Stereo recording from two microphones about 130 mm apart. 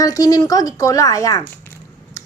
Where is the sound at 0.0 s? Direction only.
25° left (ahead or behind).